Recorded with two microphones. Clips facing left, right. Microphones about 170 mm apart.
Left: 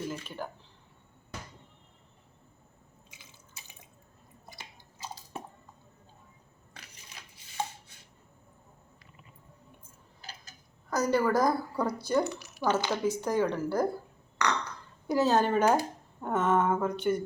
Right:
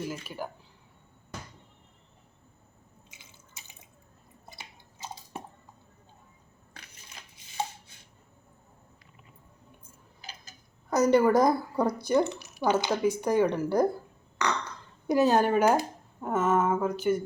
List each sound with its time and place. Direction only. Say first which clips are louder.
0.0 s speech: right 1 dB; 10° right (ahead or behind)
3.1 s drip: left 1 dB; 25° right (ahead or behind)
10.2 s tick-tock: right 1 dB; 15° right (ahead or behind)
10.8 s speech: right 5 dB; 20° right (ahead or behind)
15.0 s speech: right 3 dB; 15° right (ahead or behind)